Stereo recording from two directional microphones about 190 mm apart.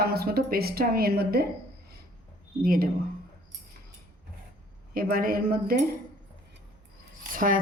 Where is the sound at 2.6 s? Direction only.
50° right (ahead or behind).